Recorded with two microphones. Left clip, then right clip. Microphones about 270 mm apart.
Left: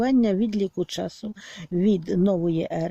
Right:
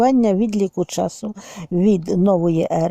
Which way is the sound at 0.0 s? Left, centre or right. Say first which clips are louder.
Right 7 dB; centre.